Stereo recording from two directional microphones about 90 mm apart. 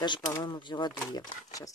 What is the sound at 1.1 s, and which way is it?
Speech, 45° left (ahead or behind).